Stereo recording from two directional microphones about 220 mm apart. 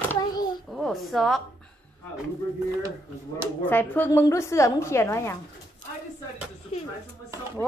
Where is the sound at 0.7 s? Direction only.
Centre (ahead or behind).